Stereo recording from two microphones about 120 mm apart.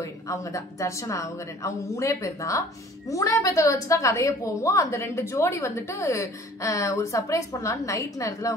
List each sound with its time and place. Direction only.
0.0 s a woman's voice: 25° left (ahead or behind)